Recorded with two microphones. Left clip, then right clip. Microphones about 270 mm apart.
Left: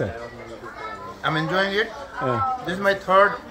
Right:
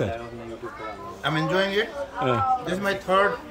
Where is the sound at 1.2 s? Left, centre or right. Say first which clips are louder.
Left 1 dB; centre.